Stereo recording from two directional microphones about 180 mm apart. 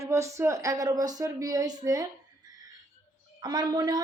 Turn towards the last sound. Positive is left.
turn(degrees=-25)  # may be behind; listen again after turning